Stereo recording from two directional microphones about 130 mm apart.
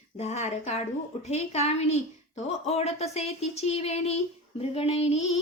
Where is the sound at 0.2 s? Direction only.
60° left (ahead or behind).